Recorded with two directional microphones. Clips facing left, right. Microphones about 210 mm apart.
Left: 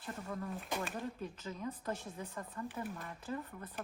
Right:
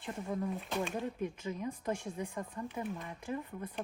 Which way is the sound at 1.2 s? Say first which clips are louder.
Right 5 dB; 10° right (ahead or behind).